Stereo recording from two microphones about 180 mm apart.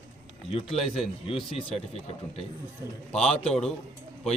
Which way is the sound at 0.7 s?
Centre (ahead or behind).